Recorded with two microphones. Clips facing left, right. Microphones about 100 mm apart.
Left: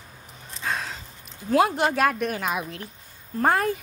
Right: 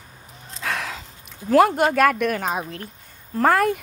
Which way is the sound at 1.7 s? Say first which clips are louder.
Right 4 dB; 50° right (ahead or behind).